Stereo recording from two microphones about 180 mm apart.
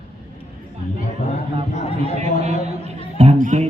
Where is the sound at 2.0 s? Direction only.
35° right (ahead or behind).